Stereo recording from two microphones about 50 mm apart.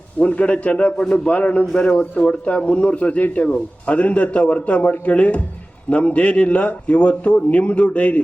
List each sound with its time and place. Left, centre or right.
0.2 s speech: left
0.9 s a man's voice: centre
1.3 s speech: left
1.7 s speech: centre